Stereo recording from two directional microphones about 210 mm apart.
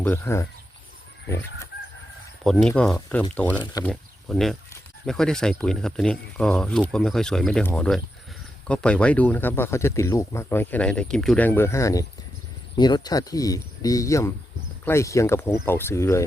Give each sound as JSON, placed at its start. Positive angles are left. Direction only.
{"t": 0.0, "sound": "speech", "side_deg": 10}
{"t": 2.4, "sound": "speech", "side_deg": 0}
{"t": 3.6, "sound": "speech", "side_deg": 20}
{"t": 3.8, "sound": "speech", "side_deg": 0}